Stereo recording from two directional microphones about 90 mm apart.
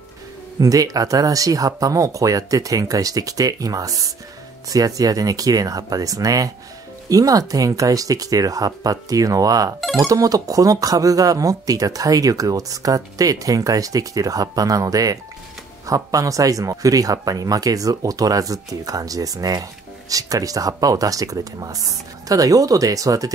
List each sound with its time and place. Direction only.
0.6 s speech: 40° right (ahead or behind)